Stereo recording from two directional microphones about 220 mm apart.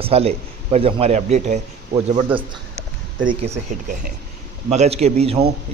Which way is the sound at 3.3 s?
30° right (ahead or behind).